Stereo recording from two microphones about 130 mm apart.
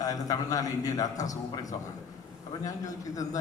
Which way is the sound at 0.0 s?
30° left (ahead or behind).